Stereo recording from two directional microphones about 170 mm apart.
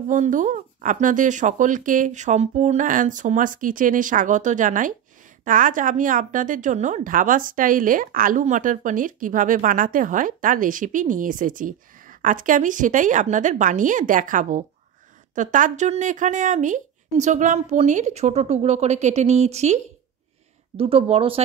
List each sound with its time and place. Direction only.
0.1 s a woman's voice: 50° right (ahead or behind)